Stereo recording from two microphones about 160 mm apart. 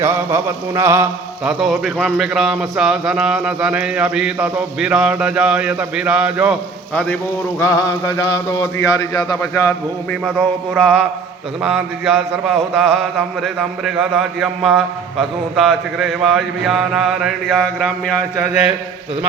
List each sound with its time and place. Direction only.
0.0 s mantra: 15° right (ahead or behind)
1.5 s speech: centre (ahead or behind)
6.9 s speech: 5° left (ahead or behind)
7.6 s speech: 20° left (ahead or behind)
10.2 s speech: centre (ahead or behind)